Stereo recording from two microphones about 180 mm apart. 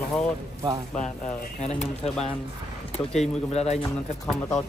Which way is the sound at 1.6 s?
35° left (ahead or behind).